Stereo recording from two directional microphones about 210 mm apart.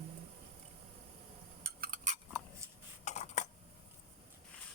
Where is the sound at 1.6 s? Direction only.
45° right (ahead or behind).